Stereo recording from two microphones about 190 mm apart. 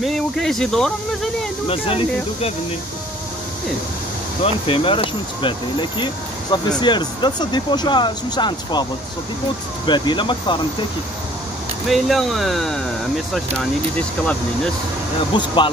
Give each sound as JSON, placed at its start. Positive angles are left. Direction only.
{"t": 0.0, "sound": "speech", "side_deg": 0}
{"t": 1.7, "sound": "speech", "side_deg": 30}
{"t": 4.4, "sound": "speech", "side_deg": 30}
{"t": 9.8, "sound": "speech", "side_deg": 25}
{"t": 11.9, "sound": "speech", "side_deg": 0}
{"t": 15.3, "sound": "speech", "side_deg": 25}